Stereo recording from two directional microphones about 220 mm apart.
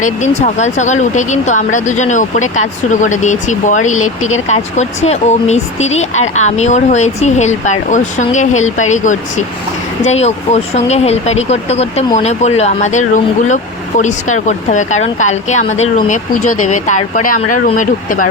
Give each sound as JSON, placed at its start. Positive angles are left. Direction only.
{"t": 0.0, "sound": "speech", "side_deg": 35}